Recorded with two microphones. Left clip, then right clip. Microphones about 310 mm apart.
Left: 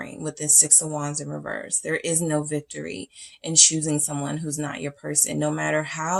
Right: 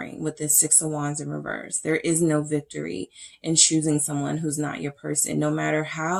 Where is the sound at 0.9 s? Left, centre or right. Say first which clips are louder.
Right 1 dB; left.